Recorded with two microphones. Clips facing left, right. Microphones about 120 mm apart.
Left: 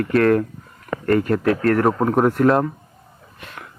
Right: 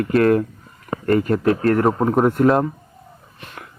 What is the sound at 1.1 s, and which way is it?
Speech, 5° right (ahead or behind).